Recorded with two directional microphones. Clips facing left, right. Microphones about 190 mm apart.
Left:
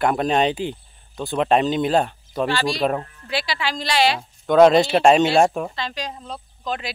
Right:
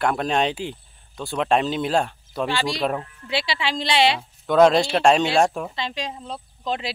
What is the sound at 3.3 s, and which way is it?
Speech, 25° right (ahead or behind).